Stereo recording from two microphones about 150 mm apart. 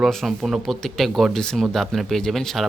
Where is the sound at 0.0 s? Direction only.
Centre (ahead or behind).